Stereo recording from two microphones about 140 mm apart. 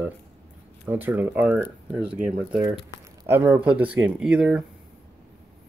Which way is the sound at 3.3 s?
15° right (ahead or behind).